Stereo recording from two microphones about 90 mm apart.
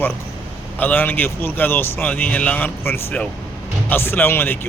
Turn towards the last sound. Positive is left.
turn(degrees=25)  # may be behind; listen again after turning